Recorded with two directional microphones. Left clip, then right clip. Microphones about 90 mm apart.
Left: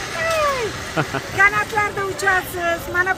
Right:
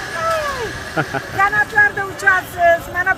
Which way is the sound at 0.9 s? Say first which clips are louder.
Right 4 dB; 10° left (ahead or behind).